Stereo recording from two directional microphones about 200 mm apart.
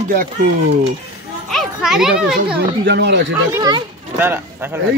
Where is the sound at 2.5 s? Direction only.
60° right (ahead or behind).